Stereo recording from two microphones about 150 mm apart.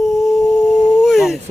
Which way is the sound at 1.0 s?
Centre (ahead or behind).